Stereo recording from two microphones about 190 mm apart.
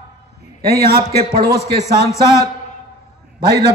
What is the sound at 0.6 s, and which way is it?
Speech, 55° right (ahead or behind).